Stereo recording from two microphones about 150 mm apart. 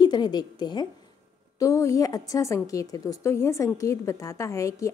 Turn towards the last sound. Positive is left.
turn(degrees=20)  # may be behind; listen again after turning